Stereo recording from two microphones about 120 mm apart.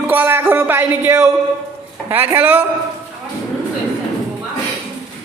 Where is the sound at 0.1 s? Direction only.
15° right (ahead or behind).